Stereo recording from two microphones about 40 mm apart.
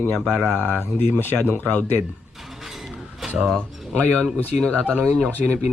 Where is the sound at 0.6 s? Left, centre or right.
Left.